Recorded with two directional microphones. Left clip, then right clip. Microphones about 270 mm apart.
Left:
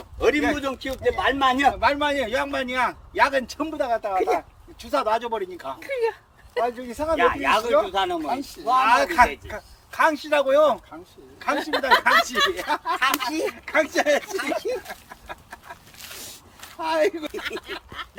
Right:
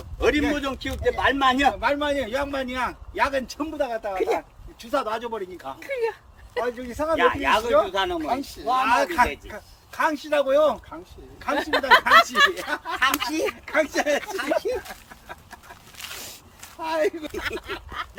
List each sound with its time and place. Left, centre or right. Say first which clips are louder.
0.2 s a man's voice: left 1 dB; centre
11.5 s a man's voice: right 2 dB; centre
16.0 s zipper: right 5 dB; centre
16.8 s a man's voice: left 2 dB; centre
18.0 s a sound: right 3 dB; centre